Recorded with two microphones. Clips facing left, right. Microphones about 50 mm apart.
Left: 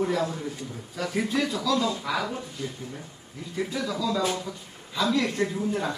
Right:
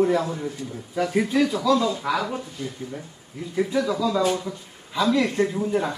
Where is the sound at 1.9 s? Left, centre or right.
Right.